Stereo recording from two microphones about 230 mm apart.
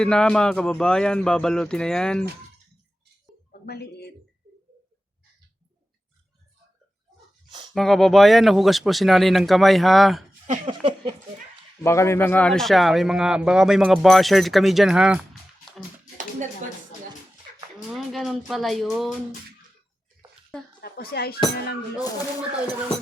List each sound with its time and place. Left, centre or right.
0.0 s speech: centre
3.7 s speech: left
7.7 s speech: centre
10.4 s speech: right
11.8 s speech: centre
17.7 s speech: centre
20.8 s speech: left